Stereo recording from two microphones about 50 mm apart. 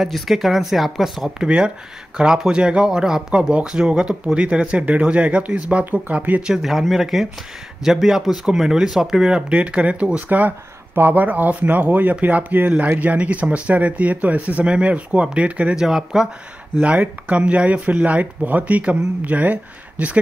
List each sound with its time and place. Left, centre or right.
0.0 s speech: centre
1.4 s speech: centre; by 6.4 s right
6.6 s speech: centre
9.5 s speech: right
15.7 s speech: centre
17.3 s speech: right